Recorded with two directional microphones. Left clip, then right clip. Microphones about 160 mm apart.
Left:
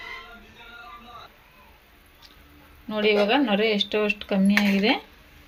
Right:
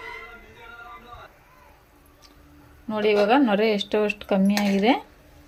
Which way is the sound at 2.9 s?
10° right (ahead or behind).